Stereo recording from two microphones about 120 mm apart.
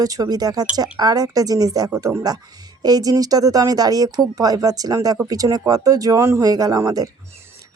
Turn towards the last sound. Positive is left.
turn(degrees=-30)  # may be behind; listen again after turning